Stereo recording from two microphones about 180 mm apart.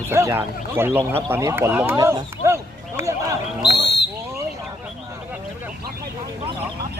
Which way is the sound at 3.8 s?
70° left (ahead or behind).